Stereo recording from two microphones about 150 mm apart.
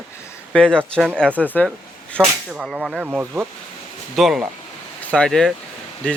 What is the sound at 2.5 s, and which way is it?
Speech, centre (ahead or behind).